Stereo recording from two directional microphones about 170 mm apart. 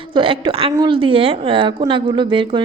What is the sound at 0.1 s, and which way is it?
A woman's voice, 30° right (ahead or behind).